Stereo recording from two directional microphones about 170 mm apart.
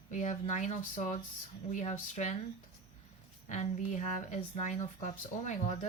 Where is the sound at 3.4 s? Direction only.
45° left (ahead or behind).